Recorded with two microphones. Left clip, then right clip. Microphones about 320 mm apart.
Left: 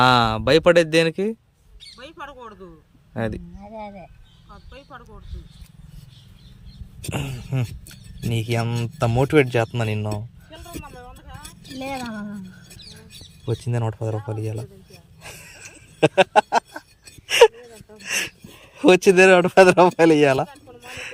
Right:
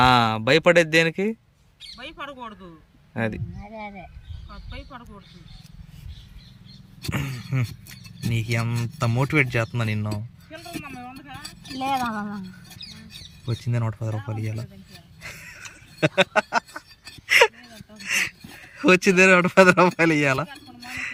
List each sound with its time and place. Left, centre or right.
0.0 s speech: centre
3.1 s speech: centre
7.1 s speech: centre
10.5 s a sound: left
13.6 s speech: centre
15.2 s a sound: centre
18.0 s speech: centre